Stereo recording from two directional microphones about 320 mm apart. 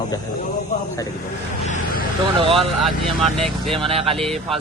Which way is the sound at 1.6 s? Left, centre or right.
Left.